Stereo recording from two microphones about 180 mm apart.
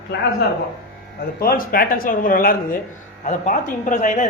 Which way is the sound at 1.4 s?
55° left (ahead or behind).